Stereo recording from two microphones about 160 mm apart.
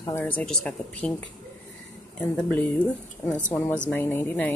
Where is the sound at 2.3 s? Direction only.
5° left (ahead or behind).